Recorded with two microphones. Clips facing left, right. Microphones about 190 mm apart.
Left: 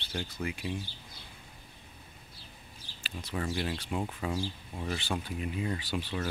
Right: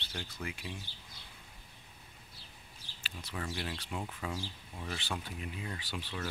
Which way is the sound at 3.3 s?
35° left (ahead or behind).